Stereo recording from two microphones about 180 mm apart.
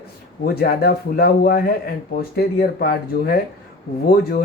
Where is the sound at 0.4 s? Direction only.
60° left (ahead or behind).